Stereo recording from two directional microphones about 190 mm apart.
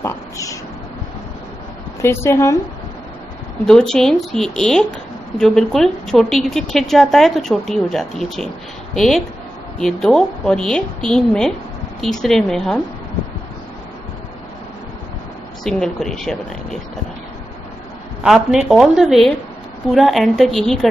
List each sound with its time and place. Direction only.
0.0 s a sound: 15° left (ahead or behind)
2.0 s a woman's voice: 15° left (ahead or behind)
3.6 s speech: 5° left (ahead or behind)
15.6 s speech: centre (ahead or behind)
18.2 s speech: centre (ahead or behind)